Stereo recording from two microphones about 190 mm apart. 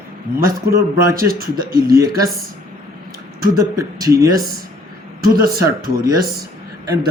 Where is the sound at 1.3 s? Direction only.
50° right (ahead or behind).